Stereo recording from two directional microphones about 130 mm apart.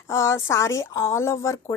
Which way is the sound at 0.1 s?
20° left (ahead or behind).